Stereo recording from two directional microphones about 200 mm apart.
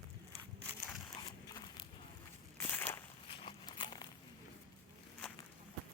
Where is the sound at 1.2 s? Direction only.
20° left (ahead or behind).